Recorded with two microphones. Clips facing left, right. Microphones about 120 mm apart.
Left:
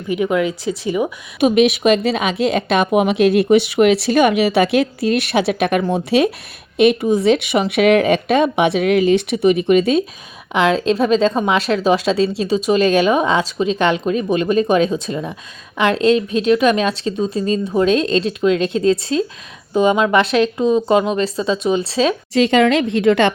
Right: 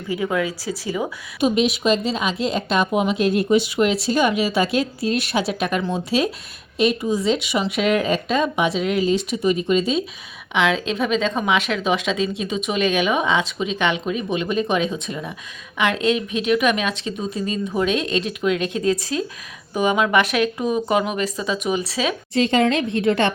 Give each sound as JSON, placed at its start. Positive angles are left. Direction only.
{"t": 0.1, "sound": "speech", "side_deg": 20}
{"t": 1.4, "sound": "a woman's voice", "side_deg": 65}
{"t": 10.5, "sound": "a woman's voice", "side_deg": 40}
{"t": 22.4, "sound": "a woman's voice", "side_deg": 90}